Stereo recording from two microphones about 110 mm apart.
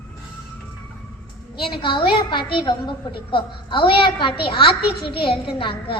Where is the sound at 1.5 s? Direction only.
50° left (ahead or behind).